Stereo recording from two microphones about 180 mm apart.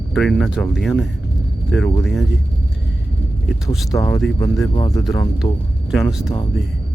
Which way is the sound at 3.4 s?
Centre (ahead or behind).